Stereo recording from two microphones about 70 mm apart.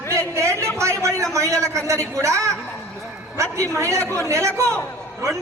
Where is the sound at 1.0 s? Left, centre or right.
Right.